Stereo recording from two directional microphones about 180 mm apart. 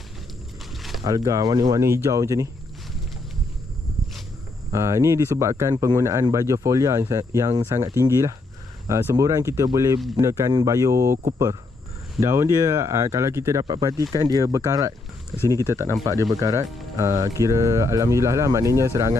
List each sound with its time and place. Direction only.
0.8 s a sound: centre (ahead or behind)
1.0 s speech: 20° right (ahead or behind)
4.7 s speech: 15° right (ahead or behind)
15.3 s speech: centre (ahead or behind)
15.7 s speech: 15° right (ahead or behind)